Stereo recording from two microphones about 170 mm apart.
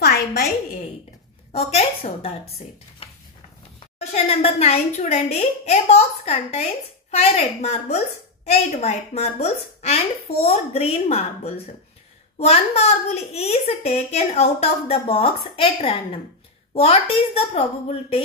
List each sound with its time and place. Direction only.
0.0 s music: 70° left (ahead or behind)
1.5 s a woman's voice: 35° left (ahead or behind)
3.0 s a sound: 35° left (ahead or behind)
4.1 s a woman's voice: 35° left (ahead or behind)